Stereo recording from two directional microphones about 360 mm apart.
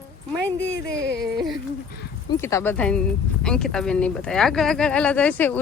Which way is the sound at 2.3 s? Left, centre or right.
Centre.